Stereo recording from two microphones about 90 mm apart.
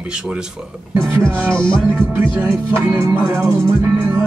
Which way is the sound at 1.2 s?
30° right (ahead or behind).